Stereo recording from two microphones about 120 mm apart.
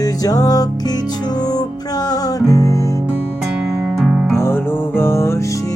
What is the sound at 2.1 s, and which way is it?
Music, 30° left (ahead or behind).